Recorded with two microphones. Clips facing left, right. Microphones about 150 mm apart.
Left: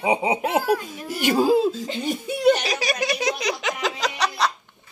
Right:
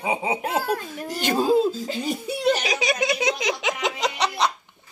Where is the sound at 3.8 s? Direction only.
20° right (ahead or behind).